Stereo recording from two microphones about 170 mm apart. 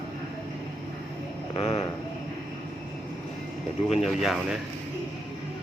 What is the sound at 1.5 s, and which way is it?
Speech, 40° left (ahead or behind).